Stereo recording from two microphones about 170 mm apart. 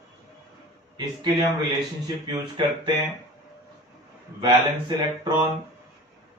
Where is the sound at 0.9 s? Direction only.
25° right (ahead or behind).